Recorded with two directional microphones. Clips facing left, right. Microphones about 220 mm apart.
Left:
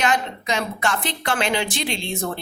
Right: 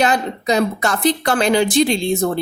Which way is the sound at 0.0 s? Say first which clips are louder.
Right 5 dB; 35° right (ahead or behind).